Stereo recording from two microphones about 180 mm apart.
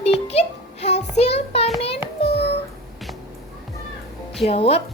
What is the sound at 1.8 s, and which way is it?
Child singing, 35° left (ahead or behind).